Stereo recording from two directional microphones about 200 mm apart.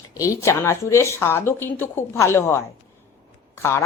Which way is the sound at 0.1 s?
15° left (ahead or behind).